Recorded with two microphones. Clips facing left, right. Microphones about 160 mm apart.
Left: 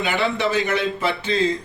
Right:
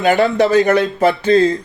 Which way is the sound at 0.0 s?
40° right (ahead or behind).